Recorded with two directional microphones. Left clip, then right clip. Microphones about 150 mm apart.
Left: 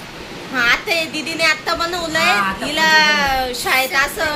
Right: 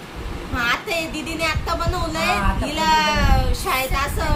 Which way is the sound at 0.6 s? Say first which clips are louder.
Left 6 dB; centre (ahead or behind).